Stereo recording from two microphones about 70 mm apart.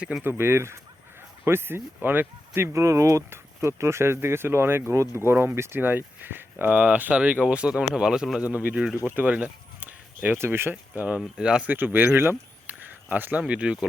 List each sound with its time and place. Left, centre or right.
0.2 s speech: right; by 8.4 s centre
8.4 s speech: right
9.0 s a sound: right
10.3 s speech: right
11.3 s speech: centre
11.7 s speech: right